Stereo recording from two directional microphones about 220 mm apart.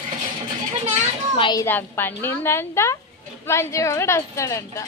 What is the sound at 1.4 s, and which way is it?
A woman's voice, 15° left (ahead or behind).